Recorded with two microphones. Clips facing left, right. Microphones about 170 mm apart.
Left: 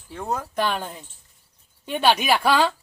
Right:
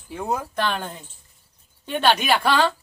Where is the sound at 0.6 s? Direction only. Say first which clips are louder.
Even; 10° left (ahead or behind).